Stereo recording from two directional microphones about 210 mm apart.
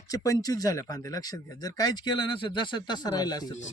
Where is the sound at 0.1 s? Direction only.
15° left (ahead or behind).